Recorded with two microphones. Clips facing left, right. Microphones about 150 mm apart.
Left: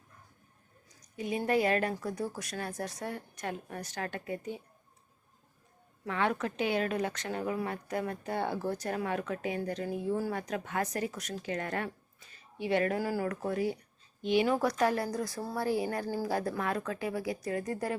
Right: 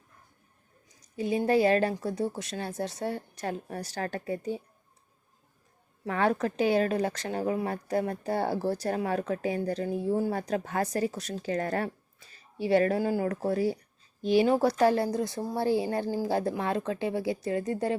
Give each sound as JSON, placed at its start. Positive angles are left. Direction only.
{"t": 1.1, "sound": "speech", "side_deg": -30}
{"t": 6.1, "sound": "speech", "side_deg": -40}
{"t": 16.0, "sound": "speech", "side_deg": -15}
{"t": 16.3, "sound": "speech", "side_deg": -25}